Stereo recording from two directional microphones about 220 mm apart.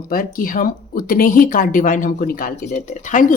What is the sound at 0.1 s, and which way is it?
Speech, 40° left (ahead or behind).